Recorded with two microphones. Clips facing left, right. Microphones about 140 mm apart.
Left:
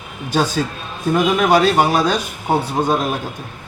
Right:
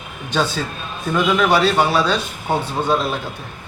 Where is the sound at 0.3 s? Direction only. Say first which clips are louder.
Left 3 dB; 40° left (ahead or behind).